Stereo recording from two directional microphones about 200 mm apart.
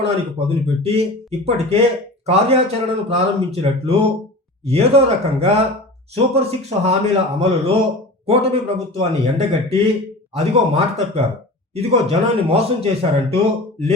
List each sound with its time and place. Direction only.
0.0 s speech: 30° right (ahead or behind)